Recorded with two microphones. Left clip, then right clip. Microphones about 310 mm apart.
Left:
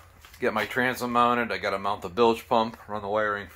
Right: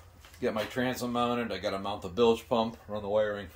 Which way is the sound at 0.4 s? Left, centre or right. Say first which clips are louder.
Left 6 dB; centre.